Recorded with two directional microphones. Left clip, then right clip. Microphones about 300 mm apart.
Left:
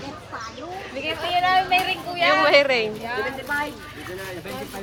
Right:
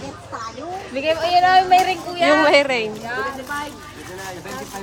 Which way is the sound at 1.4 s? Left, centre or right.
Right.